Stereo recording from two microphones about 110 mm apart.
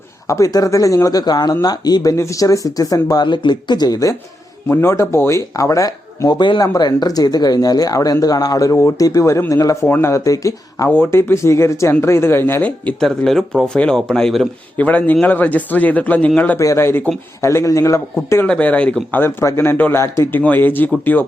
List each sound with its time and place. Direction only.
0.3 s speech: 30° left (ahead or behind)
4.7 s speech: 20° left (ahead or behind)
6.4 s speech: 40° left (ahead or behind)
10.8 s speech: 15° left (ahead or behind)
13.1 s speech: 5° left (ahead or behind)
16.6 s speech: 25° left (ahead or behind)
18.4 s speech: 10° left (ahead or behind)